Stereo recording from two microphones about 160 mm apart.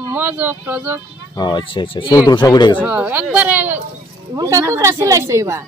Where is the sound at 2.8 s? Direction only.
10° right (ahead or behind).